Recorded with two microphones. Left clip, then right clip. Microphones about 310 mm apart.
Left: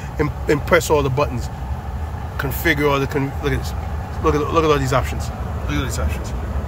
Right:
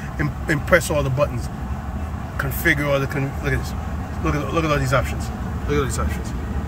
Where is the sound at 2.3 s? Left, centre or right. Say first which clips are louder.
Left 1 dB; centre.